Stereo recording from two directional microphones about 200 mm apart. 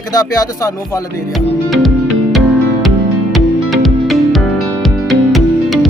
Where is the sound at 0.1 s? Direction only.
20° left (ahead or behind).